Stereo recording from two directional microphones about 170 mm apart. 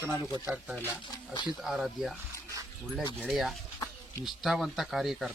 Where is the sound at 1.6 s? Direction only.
Centre (ahead or behind).